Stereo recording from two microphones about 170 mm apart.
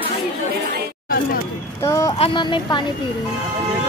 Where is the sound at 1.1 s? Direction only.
60° left (ahead or behind).